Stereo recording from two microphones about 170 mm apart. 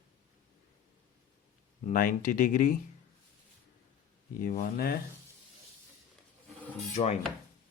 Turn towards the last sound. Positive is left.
turn(degrees=40)  # may be behind; listen again after turning